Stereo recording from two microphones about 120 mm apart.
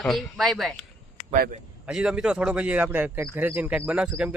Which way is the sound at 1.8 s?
5° right (ahead or behind).